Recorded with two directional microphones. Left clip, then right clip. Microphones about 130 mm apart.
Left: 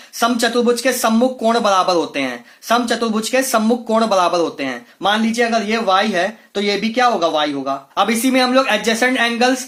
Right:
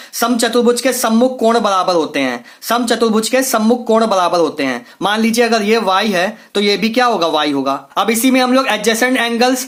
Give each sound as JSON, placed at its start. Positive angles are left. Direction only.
{"t": 0.2, "sound": "speech", "side_deg": -25}